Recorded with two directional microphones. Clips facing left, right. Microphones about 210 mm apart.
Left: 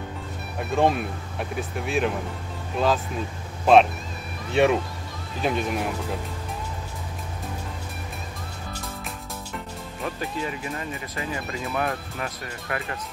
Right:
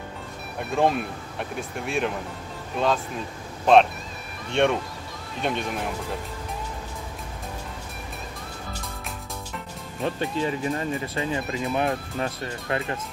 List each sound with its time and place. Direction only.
0.6 s speech: centre (ahead or behind)
3.7 s speech: 5° left (ahead or behind)
10.0 s speech: 30° right (ahead or behind)